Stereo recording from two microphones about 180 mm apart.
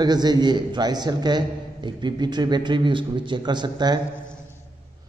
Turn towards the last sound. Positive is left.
turn(degrees=-25)  # may be behind; listen again after turning